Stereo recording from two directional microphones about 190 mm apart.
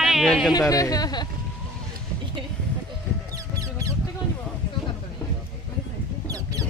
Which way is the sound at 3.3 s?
15° right (ahead or behind).